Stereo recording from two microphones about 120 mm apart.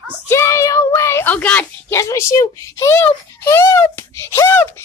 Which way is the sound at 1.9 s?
25° left (ahead or behind).